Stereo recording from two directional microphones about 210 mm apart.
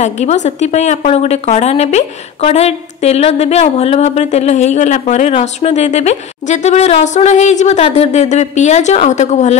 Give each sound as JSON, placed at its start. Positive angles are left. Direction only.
{"t": 0.0, "sound": "a woman's voice", "side_deg": 35}